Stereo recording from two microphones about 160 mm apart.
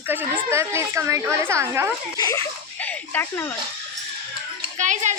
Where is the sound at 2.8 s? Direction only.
15° left (ahead or behind).